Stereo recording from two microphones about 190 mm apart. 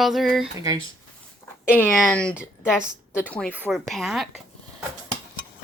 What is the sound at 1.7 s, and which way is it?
Speech, 5° left (ahead or behind).